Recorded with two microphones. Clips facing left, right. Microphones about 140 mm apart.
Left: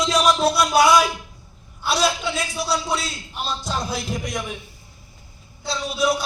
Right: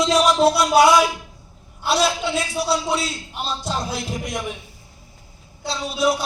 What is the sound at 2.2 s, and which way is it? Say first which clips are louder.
Speech: right 3 dB; 30° right (ahead or behind).